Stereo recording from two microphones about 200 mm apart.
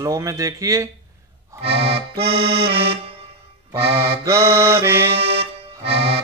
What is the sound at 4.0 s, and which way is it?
Accordion, 15° right (ahead or behind).